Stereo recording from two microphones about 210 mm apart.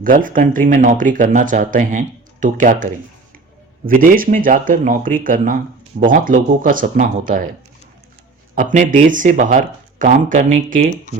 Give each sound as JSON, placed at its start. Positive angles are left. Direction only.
{"t": 0.0, "sound": "speech", "side_deg": -40}
{"t": 8.5, "sound": "speech", "side_deg": -35}